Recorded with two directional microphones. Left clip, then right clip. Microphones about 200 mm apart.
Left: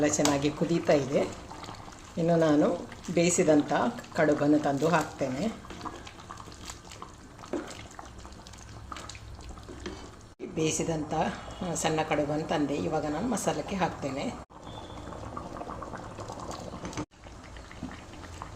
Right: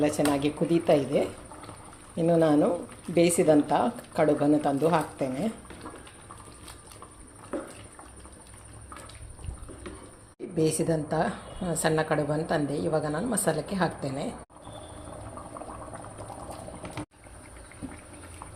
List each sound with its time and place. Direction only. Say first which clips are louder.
0.0 s a woman's voice: right 1 dB; 5° right (ahead or behind)
10.6 s a woman's voice: right 4 dB; 15° right (ahead or behind)